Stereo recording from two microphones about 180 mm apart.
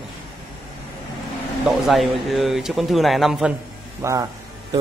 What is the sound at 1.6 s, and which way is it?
Speech, centre (ahead or behind).